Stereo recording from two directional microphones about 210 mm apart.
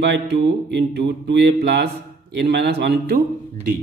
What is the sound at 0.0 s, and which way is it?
A man's voice, 55° right (ahead or behind).